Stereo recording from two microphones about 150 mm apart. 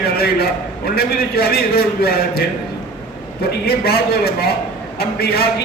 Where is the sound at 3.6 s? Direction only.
90° left.